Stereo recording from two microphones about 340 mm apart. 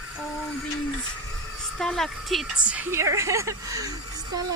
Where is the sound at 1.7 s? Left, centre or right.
Centre.